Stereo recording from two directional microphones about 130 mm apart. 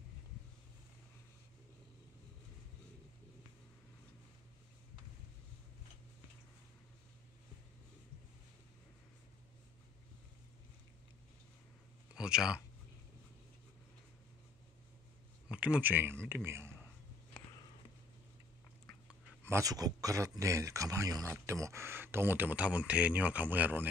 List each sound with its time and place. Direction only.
12.2 s speech: 5° right (ahead or behind)
15.4 s speech: 10° right (ahead or behind)
19.4 s speech: 25° right (ahead or behind)